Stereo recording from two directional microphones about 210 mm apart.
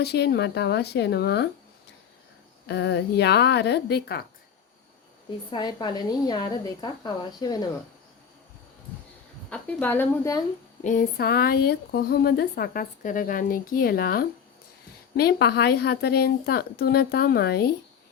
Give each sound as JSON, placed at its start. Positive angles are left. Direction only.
{"t": 0.0, "sound": "speech", "side_deg": 50}
{"t": 2.6, "sound": "speech", "side_deg": 55}
{"t": 5.5, "sound": "a woman's voice", "side_deg": 20}
{"t": 9.5, "sound": "speech", "side_deg": 10}
{"t": 10.8, "sound": "speech", "side_deg": 45}